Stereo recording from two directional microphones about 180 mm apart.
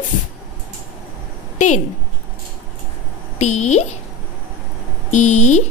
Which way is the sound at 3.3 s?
40° left (ahead or behind).